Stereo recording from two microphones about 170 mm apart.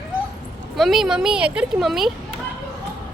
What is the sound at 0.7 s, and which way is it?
Speech, centre (ahead or behind).